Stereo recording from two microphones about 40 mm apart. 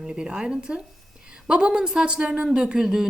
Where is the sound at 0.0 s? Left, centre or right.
Right.